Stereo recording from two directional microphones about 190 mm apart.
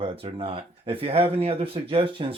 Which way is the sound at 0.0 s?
30° right (ahead or behind).